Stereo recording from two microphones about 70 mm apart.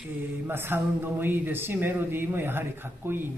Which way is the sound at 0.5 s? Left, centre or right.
Right.